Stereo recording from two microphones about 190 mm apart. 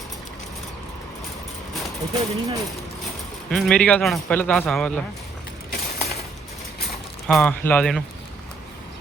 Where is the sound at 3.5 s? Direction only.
Centre (ahead or behind).